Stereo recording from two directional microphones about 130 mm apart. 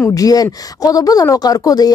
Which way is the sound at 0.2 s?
30° left (ahead or behind).